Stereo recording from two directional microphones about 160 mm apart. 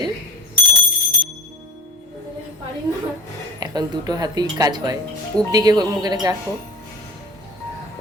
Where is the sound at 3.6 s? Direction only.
25° right (ahead or behind).